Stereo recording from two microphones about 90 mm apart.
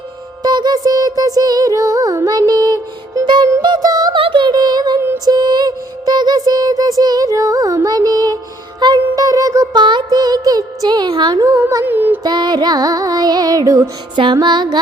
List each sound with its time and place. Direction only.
0.4 s music: 50° right (ahead or behind)
4.1 s music: 65° right (ahead or behind)
9.1 s music: 40° right (ahead or behind)
9.7 s music: 55° right (ahead or behind)
11.4 s music: 35° right (ahead or behind)
11.9 s music: 20° right (ahead or behind)
12.2 s music: 50° right (ahead or behind)
14.4 s music: 55° right (ahead or behind)